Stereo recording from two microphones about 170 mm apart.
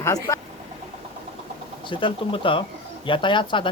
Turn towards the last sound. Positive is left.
turn(degrees=30)  # may be behind; listen again after turning